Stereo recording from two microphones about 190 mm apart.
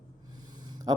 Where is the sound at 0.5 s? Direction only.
20° right (ahead or behind).